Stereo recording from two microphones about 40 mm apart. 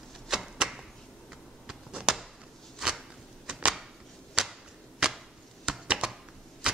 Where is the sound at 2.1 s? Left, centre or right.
Centre.